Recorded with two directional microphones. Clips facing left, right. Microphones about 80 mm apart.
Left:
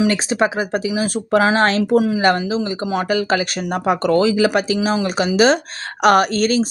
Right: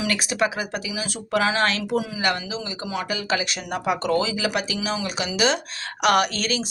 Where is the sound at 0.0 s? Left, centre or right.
Left.